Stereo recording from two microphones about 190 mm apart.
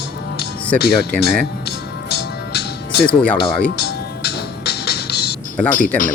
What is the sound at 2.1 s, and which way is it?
Music, 60° left (ahead or behind).